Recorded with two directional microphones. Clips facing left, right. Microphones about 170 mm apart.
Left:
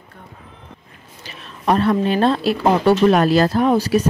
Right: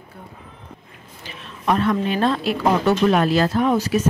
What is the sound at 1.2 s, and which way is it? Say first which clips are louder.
A woman's voice: left 2 dB; 35° left (ahead or behind).